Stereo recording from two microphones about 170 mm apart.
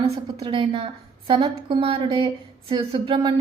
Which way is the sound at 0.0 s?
30° right (ahead or behind).